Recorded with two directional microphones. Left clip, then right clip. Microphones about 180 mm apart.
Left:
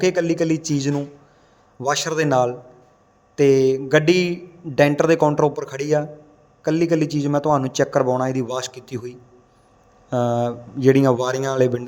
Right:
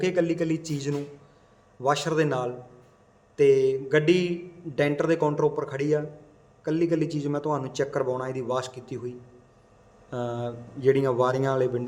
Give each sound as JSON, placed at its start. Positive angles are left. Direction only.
{"t": 0.0, "sound": "a man's voice", "side_deg": 35}